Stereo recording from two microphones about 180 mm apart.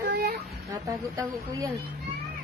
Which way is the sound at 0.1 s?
70° right (ahead or behind).